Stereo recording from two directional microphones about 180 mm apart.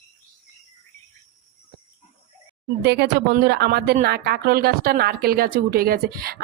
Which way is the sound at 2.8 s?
70° right (ahead or behind).